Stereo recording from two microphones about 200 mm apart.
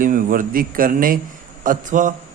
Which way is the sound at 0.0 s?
45° right (ahead or behind).